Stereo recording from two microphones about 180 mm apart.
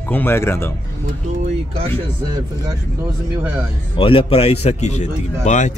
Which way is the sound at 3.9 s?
30° left (ahead or behind).